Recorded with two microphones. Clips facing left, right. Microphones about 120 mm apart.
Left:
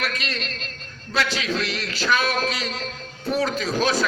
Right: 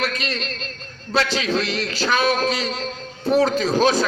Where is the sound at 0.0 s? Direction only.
30° right (ahead or behind).